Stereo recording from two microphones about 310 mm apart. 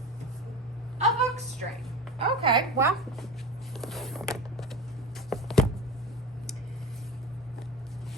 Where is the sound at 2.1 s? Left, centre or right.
Centre.